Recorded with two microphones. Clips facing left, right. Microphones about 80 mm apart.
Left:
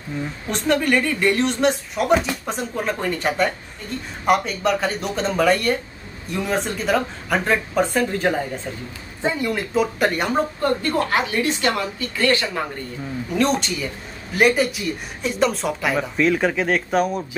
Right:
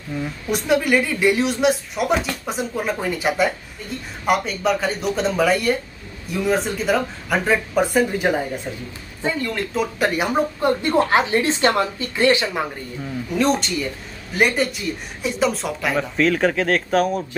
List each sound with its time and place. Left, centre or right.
0.5 s speech: centre
9.2 s speech: centre
10.6 s a woman's voice: centre
13.3 s speech: centre